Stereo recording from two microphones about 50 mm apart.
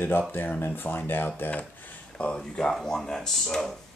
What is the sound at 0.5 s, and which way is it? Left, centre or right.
Speech, left.